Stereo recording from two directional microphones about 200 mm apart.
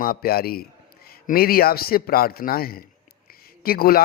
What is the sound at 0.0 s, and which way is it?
A man's voice, 50° left (ahead or behind).